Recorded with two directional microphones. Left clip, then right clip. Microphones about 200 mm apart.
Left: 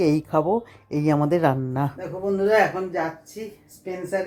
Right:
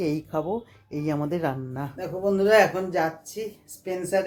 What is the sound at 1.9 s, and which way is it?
Speech, centre (ahead or behind).